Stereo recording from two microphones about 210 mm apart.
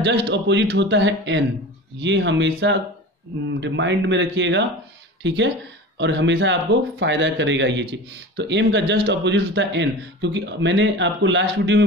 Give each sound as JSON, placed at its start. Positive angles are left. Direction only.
{"t": 0.0, "sound": "speech", "side_deg": -55}